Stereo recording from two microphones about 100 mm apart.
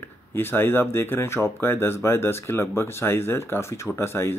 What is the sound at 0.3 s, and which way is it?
Speech, 25° left (ahead or behind).